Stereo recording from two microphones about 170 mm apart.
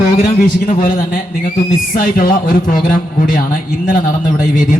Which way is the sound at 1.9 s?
55° left (ahead or behind).